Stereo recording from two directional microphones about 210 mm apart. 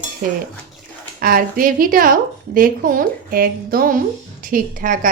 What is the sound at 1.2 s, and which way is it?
A woman's voice, 45° right (ahead or behind).